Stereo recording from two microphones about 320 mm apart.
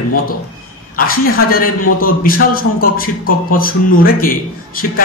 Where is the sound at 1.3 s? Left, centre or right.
Left.